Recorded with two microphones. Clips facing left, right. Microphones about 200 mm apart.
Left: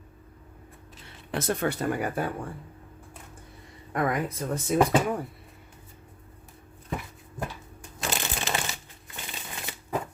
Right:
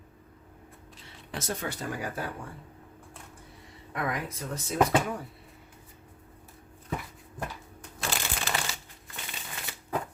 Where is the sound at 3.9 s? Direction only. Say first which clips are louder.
Left 6 dB; 50° left (ahead or behind).